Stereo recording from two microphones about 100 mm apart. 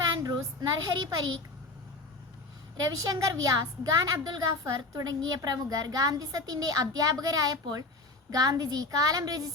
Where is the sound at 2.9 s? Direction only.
40° right (ahead or behind).